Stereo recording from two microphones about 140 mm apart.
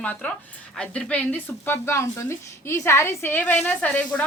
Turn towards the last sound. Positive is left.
turn(degrees=10)  # may be behind; listen again after turning